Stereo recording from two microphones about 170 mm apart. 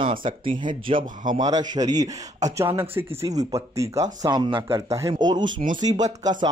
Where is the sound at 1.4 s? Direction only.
25° right (ahead or behind).